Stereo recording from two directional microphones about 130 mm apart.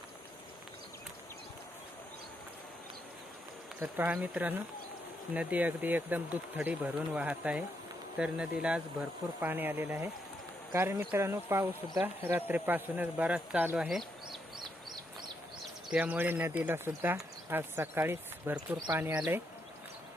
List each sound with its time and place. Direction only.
3.8 s speech: 15° right (ahead or behind)
15.9 s speech: 10° right (ahead or behind)